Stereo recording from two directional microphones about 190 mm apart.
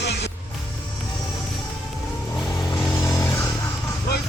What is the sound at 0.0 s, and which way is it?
Music, 60° left (ahead or behind).